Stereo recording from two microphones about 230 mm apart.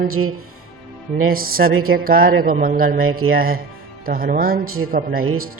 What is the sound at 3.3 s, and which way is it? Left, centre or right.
Speech, right.